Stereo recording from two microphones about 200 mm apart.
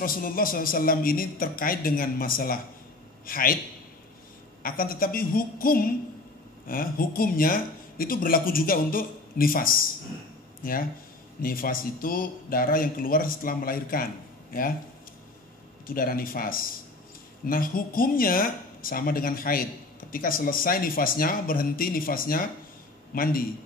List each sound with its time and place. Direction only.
0.0 s speech: 45° left (ahead or behind)
4.6 s speech: 45° left (ahead or behind)
15.9 s speech: 45° left (ahead or behind)